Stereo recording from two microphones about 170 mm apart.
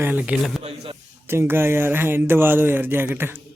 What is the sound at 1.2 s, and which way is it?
Speech, 15° right (ahead or behind).